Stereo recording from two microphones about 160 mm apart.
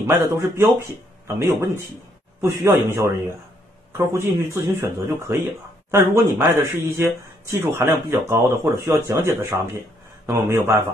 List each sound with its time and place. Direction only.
0.0 s speech: 15° right (ahead or behind)